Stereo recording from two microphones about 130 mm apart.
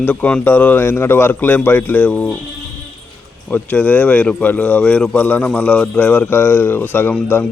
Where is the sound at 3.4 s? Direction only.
10° left (ahead or behind).